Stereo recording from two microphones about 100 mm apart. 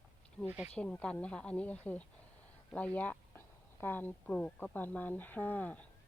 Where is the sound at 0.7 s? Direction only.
10° left (ahead or behind).